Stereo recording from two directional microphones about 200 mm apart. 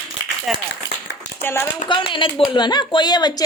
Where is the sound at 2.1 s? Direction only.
25° left (ahead or behind).